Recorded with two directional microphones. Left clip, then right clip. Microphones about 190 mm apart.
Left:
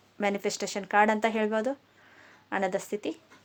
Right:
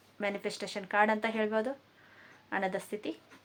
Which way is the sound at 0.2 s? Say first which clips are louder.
Left 6 dB; 50° left (ahead or behind).